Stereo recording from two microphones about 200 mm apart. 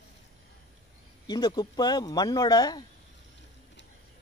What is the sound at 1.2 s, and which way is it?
Speech, 20° left (ahead or behind).